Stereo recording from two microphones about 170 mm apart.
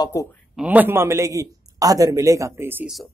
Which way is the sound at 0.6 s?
10° right (ahead or behind).